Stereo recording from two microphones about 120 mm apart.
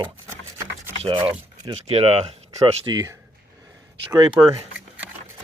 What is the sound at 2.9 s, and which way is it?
Speech, 35° right (ahead or behind).